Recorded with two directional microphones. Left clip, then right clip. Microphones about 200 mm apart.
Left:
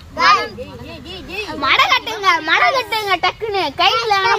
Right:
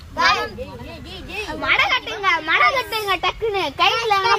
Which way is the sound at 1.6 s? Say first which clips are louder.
Left 4 dB; 65° left (ahead or behind).